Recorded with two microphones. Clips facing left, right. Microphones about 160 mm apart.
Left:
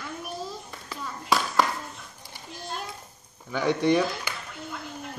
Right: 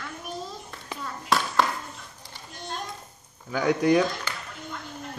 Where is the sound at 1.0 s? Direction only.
Centre (ahead or behind).